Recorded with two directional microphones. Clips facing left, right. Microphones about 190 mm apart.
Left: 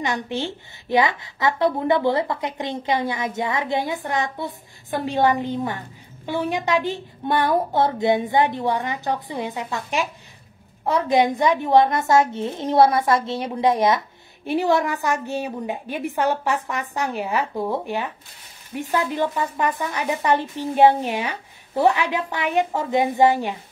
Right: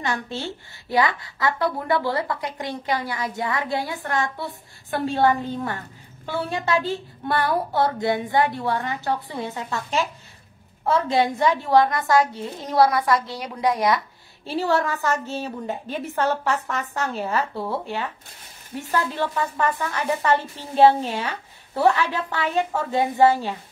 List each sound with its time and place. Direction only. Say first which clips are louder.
0.0 s a woman's voice: left 3 dB; 20° left (ahead or behind)